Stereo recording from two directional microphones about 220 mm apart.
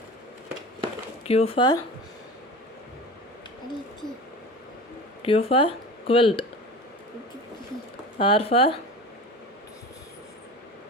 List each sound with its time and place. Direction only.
1.2 s speech: 30° left (ahead or behind)
5.2 s speech: 25° left (ahead or behind)
8.2 s speech: 25° left (ahead or behind)